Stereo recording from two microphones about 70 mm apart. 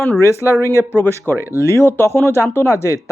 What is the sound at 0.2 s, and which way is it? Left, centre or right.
Speech, left.